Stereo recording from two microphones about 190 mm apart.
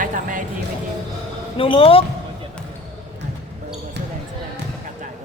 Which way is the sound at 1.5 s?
30° left (ahead or behind).